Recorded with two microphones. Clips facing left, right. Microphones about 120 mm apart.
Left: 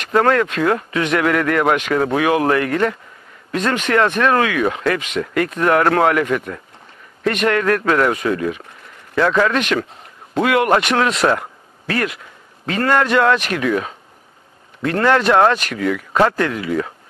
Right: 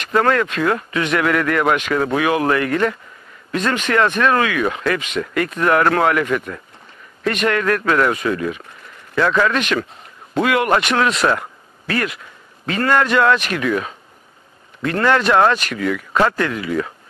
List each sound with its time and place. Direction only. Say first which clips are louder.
0.0 s speech: left 1 dB; 45° left (ahead or behind)
3.5 s speech: left 1 dB; 50° left (ahead or behind)